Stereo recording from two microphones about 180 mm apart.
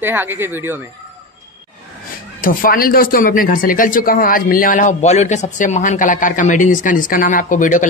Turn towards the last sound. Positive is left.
turn(degrees=45)  # may be behind; listen again after turning